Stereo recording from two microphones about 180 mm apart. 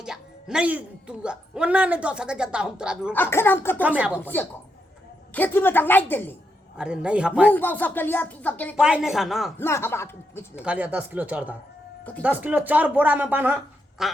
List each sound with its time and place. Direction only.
0.0 s speech: 5° right (ahead or behind)
3.1 s speech: 10° left (ahead or behind)
3.8 s speech: 10° right (ahead or behind)
4.2 s speech: 10° left (ahead or behind)
6.7 s speech: 5° right (ahead or behind)
7.5 s speech: 10° left (ahead or behind)
8.7 s speech: 5° right (ahead or behind)
9.6 s speech: 15° left (ahead or behind)
10.5 s speech: 5° right (ahead or behind)